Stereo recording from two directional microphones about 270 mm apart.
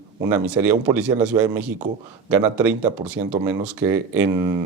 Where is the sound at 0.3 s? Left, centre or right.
Centre.